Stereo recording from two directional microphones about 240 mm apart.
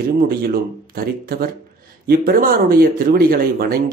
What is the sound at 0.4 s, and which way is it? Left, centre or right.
Speech, right.